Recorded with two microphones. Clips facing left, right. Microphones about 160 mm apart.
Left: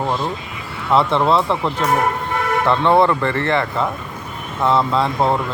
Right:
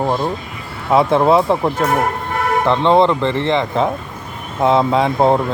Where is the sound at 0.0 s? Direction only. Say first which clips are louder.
Right 3 dB; 10° right (ahead or behind).